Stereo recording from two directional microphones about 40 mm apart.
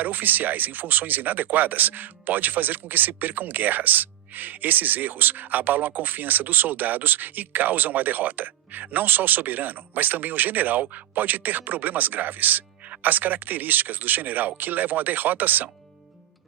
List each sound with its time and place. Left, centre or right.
0.0 s speech: right